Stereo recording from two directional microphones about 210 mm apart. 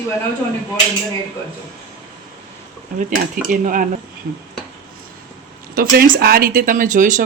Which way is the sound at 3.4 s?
40° right (ahead or behind).